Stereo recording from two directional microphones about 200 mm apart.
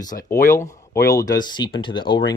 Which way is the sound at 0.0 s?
20° left (ahead or behind).